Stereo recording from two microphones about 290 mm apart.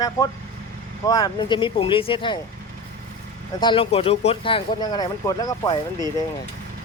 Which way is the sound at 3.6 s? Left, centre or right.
Centre.